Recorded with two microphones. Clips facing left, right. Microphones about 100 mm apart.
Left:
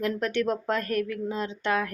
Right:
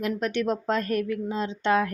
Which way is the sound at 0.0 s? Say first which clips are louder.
Even; 20° right (ahead or behind).